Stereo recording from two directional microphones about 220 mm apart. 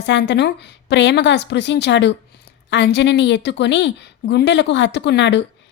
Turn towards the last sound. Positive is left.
turn(degrees=55)  # may be behind; listen again after turning